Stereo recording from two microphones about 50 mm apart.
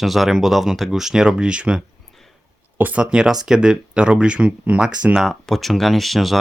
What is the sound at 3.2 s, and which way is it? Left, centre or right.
Speech, centre.